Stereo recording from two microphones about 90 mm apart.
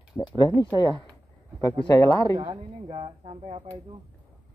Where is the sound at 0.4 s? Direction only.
50° left (ahead or behind).